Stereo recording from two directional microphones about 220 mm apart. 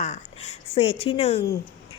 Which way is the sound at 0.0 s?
30° left (ahead or behind).